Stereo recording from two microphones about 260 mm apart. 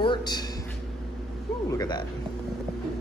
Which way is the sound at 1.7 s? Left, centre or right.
Centre.